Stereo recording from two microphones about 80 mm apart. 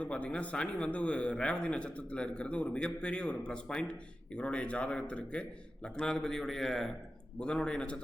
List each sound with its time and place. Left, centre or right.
0.0 s a man's voice: centre